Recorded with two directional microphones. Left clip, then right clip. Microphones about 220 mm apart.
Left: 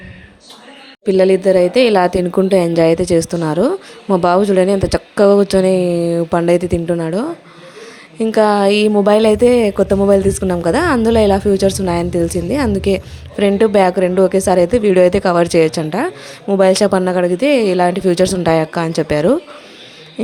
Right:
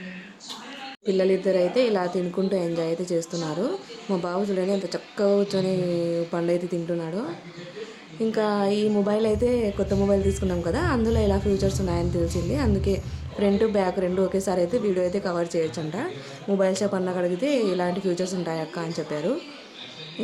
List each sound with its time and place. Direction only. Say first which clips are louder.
1.0 s a woman's voice: left 11 dB; 35° left (ahead or behind)